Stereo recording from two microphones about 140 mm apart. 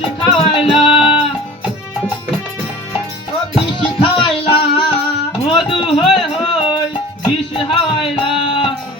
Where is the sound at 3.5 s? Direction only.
40° left (ahead or behind).